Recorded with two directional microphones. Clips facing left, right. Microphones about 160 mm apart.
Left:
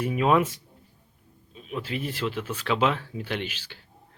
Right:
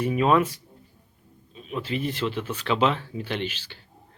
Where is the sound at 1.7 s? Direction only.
5° left (ahead or behind).